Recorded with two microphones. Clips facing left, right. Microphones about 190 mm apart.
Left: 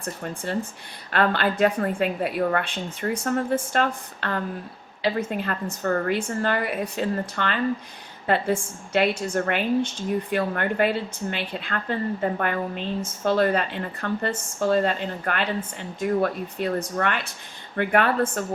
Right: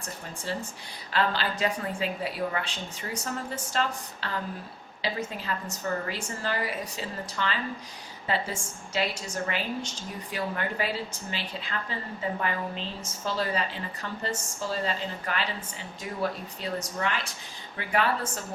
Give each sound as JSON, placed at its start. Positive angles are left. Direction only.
{"t": 1.1, "sound": "a woman's voice", "side_deg": 60}